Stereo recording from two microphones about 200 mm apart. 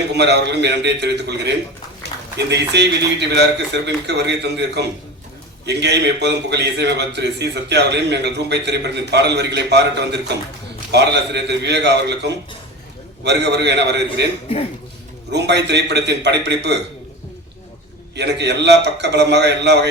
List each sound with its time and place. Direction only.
0.1 s a man's voice: 60° right (ahead or behind)
15.3 s a man's voice: 60° right (ahead or behind)
18.1 s a man's voice: 60° right (ahead or behind)